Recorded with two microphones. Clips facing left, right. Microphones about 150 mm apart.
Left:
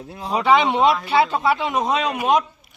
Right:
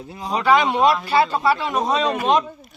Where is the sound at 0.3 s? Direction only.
20° left (ahead or behind).